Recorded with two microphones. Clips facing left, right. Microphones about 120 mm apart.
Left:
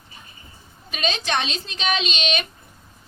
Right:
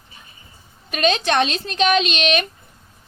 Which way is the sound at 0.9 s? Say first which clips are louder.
Right 6 dB; 55° right (ahead or behind).